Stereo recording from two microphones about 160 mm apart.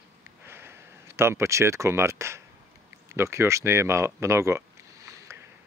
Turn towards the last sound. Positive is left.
turn(degrees=-15)  # may be behind; listen again after turning